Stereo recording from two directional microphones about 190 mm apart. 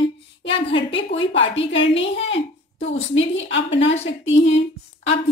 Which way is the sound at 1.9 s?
75° left (ahead or behind).